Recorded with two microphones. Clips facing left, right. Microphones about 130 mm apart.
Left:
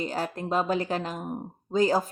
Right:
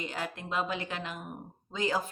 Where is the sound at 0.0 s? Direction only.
40° left (ahead or behind).